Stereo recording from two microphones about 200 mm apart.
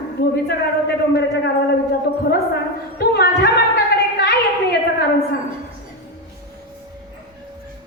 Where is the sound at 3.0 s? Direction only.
55° left (ahead or behind).